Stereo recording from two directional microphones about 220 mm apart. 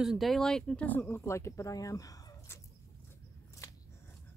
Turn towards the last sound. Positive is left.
turn(degrees=15)  # may be behind; listen again after turning